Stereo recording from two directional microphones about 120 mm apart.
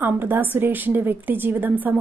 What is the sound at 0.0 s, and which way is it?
A woman's voice, 15° right (ahead or behind).